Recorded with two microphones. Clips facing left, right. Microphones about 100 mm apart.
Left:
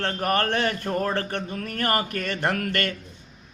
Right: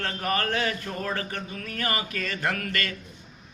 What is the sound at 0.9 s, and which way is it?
Speech, 40° left (ahead or behind).